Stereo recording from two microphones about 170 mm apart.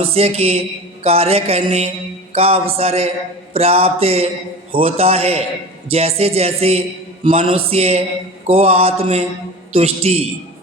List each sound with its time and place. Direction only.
0.0 s music: 35° right (ahead or behind)
2.3 s speech: 35° right (ahead or behind)
2.7 s music: 35° right (ahead or behind)